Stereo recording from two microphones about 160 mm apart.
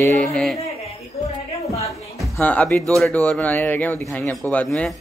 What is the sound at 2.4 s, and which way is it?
Speech, 10° left (ahead or behind).